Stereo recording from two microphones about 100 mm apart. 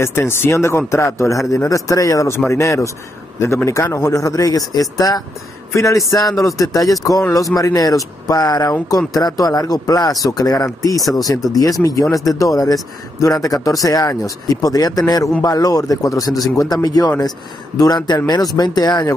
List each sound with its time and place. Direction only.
0.0 s speech: 25° left (ahead or behind)
5.7 s a man's voice: 30° left (ahead or behind)